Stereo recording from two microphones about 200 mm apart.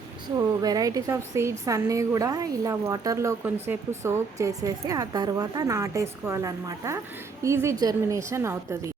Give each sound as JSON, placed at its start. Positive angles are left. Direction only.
{"t": 0.3, "sound": "a woman's voice", "side_deg": -20}